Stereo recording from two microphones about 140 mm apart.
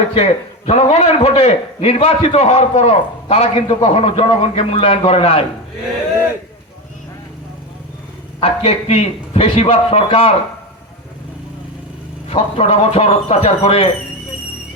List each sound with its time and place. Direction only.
0.1 s a man's voice: 45° left (ahead or behind)
8.4 s a man's voice: 45° left (ahead or behind)
12.3 s a man's voice: 40° left (ahead or behind)